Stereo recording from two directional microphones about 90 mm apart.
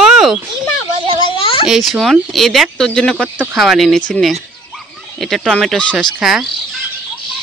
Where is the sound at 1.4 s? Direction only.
90° left.